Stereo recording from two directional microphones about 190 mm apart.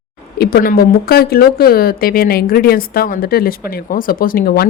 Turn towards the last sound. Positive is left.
turn(degrees=55)  # may be behind; listen again after turning